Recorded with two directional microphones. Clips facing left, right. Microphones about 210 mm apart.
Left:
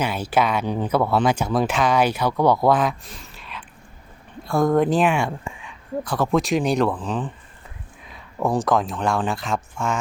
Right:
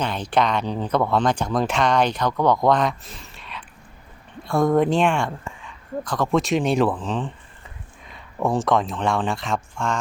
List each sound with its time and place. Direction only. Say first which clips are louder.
0.0 s speech: left 1 dB; 5° left (ahead or behind)
3.3 s a sound: even; centre (ahead or behind)
4.4 s speech: even; centre (ahead or behind)